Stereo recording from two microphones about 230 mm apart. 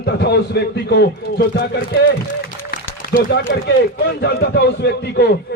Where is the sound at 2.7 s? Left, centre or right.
Left.